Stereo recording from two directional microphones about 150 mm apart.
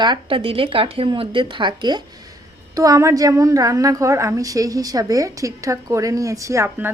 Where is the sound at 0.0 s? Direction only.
35° right (ahead or behind).